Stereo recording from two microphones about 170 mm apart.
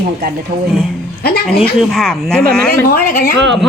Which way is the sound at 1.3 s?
65° left (ahead or behind).